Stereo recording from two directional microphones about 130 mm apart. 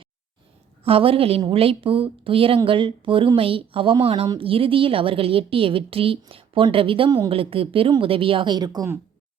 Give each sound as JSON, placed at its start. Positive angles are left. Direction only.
{"t": 0.9, "sound": "a woman's voice", "side_deg": -45}